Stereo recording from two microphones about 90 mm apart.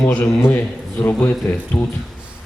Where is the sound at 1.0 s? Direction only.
20° left (ahead or behind).